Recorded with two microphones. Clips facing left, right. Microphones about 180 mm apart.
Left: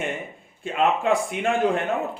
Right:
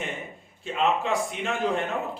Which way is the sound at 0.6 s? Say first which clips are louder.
Left 3 dB; 55° left (ahead or behind).